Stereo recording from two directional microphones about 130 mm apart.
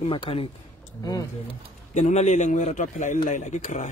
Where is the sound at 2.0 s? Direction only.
65° left (ahead or behind).